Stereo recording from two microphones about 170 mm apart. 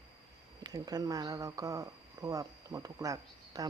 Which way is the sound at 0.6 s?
20° right (ahead or behind).